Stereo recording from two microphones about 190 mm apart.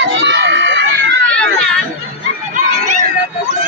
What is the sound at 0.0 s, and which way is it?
Run, 65° right (ahead or behind).